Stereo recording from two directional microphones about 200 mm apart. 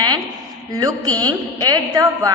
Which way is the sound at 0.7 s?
20° right (ahead or behind).